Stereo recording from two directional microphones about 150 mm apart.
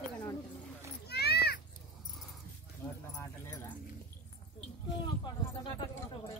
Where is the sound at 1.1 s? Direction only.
90° left.